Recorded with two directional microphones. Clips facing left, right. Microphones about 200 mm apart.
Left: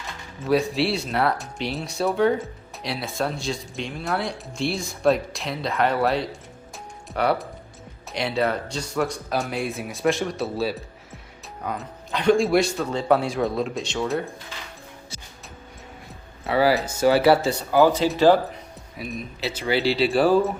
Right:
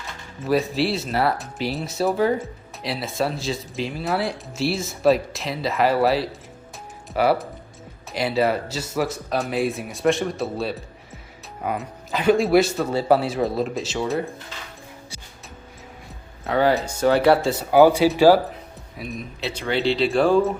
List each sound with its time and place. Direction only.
0.3 s speech: centre (ahead or behind)
11.6 s speech: 10° right (ahead or behind)
16.4 s speech: 5° left (ahead or behind)
17.7 s speech: 15° right (ahead or behind); by 20.5 s 5° left (ahead or behind)